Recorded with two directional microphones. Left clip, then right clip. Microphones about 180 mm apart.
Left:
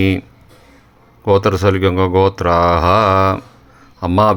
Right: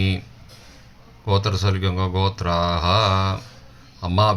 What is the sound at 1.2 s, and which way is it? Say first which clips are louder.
Speech: left 11 dB; 50° left (ahead or behind).